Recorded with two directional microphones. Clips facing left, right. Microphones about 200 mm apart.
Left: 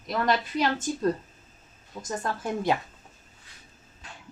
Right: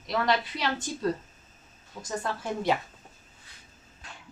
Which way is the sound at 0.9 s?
45° left (ahead or behind).